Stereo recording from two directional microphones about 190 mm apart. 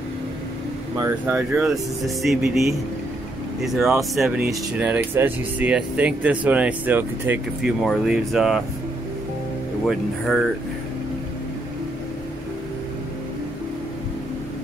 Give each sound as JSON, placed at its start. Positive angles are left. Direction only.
{"t": 0.9, "sound": "speech", "side_deg": -15}
{"t": 3.6, "sound": "speech", "side_deg": 0}
{"t": 9.8, "sound": "speech", "side_deg": 0}